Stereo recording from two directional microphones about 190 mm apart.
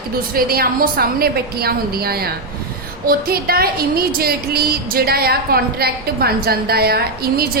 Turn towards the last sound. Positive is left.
turn(degrees=-55)  # may be behind; listen again after turning